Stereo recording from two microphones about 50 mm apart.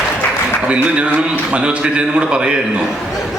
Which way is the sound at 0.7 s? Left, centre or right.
Right.